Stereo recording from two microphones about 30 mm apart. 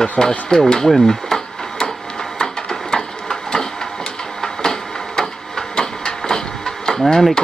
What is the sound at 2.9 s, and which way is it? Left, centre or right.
Printer, centre.